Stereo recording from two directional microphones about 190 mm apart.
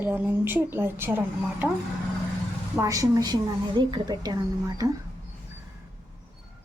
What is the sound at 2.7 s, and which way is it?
A woman's voice, 15° right (ahead or behind).